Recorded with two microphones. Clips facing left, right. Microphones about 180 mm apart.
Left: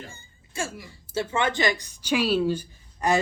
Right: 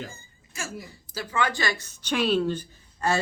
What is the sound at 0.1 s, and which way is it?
Hiccup, 30° left (ahead or behind).